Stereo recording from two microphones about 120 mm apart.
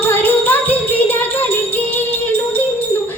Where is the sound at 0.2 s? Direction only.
15° left (ahead or behind).